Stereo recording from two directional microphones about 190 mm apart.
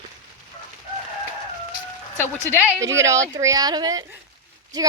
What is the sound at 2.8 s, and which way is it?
Speech, 15° right (ahead or behind).